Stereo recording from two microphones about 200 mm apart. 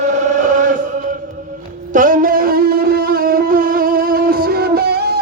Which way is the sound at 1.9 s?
40° right (ahead or behind).